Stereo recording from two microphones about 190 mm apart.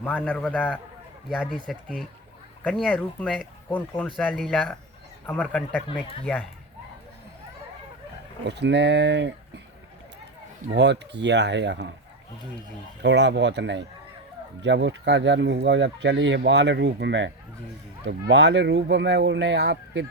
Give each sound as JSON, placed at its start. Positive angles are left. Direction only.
{"t": 0.0, "sound": "a man's voice", "side_deg": 10}
{"t": 1.5, "sound": "a man's voice", "side_deg": -5}
{"t": 8.4, "sound": "speech", "side_deg": -65}
{"t": 10.8, "sound": "speech", "side_deg": -65}
{"t": 13.0, "sound": "speech", "side_deg": -65}